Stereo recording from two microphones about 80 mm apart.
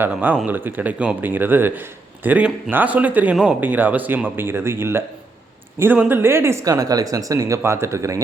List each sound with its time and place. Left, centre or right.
0.0 s speech: right
6.1 s speech: right
6.7 s speech: right